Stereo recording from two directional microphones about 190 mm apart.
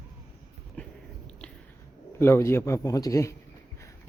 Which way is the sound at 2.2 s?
15° left (ahead or behind).